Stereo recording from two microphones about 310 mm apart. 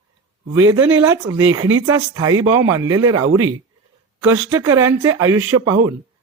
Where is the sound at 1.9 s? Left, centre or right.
Centre.